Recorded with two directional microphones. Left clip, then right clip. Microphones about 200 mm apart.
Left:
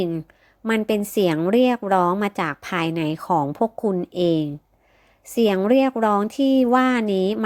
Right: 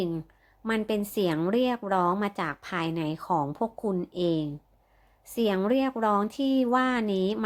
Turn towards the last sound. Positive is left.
turn(degrees=30)  # may be behind; listen again after turning